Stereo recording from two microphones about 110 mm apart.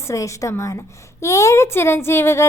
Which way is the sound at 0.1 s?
30° left (ahead or behind).